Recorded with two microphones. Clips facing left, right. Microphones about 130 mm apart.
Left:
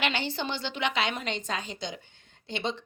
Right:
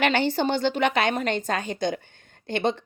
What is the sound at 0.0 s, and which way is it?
Speech, 50° right (ahead or behind).